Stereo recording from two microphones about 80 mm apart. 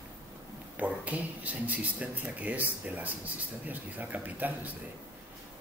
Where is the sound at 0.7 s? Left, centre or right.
Centre.